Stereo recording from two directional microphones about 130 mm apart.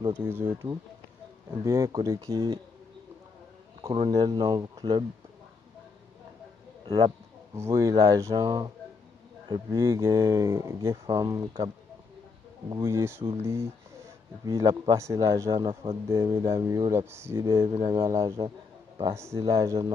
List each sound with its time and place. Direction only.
0.1 s speech: 15° right (ahead or behind)
1.5 s speech: 25° right (ahead or behind)
3.8 s speech: 35° right (ahead or behind)
6.8 s a sound: 35° right (ahead or behind)
7.5 s speech: 20° right (ahead or behind)
19.1 s speech: 20° right (ahead or behind)